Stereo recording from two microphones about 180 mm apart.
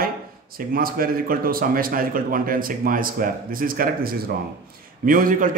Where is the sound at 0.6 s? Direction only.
55° right (ahead or behind).